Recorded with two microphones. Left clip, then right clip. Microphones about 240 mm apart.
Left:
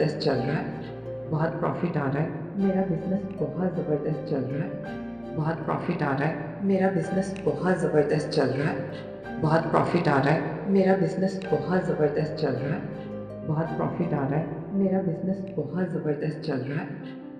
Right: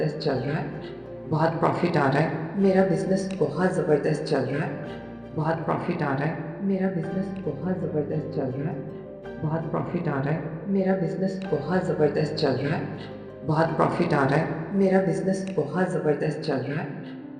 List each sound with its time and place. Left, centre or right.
0.0 s speech: centre
1.3 s a woman's voice: centre
2.7 s speech: right
4.3 s speech: right
5.4 s speech: centre
6.7 s a woman's voice: centre
7.6 s speech: left
10.8 s speech: centre
13.5 s speech: right
15.3 s a woman's voice: right